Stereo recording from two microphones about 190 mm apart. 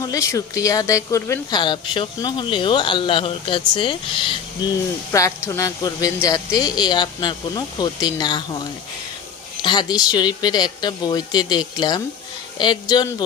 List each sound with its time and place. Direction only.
0.0 s a woman's voice: 15° left (ahead or behind)
9.6 s a woman's voice: 20° left (ahead or behind)